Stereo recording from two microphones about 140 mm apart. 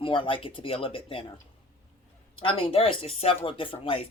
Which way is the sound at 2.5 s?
45° left (ahead or behind).